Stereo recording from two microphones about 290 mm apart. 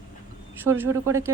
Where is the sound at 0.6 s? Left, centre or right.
Centre.